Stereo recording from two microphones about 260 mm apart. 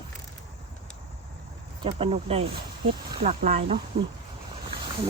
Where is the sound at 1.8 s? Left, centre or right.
Right.